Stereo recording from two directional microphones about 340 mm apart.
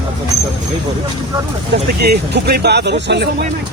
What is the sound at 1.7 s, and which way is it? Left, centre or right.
Speech, right.